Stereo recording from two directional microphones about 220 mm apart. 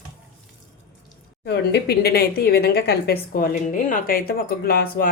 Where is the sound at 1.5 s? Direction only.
50° left (ahead or behind).